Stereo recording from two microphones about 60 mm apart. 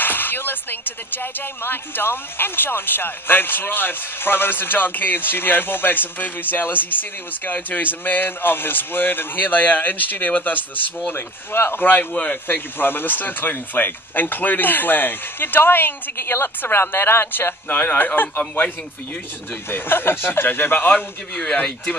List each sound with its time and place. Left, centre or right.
0.0 s speech: left
11.1 s speech: left
19.7 s speech: left